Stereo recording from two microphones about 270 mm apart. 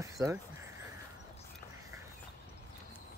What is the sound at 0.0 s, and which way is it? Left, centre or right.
Speech, centre.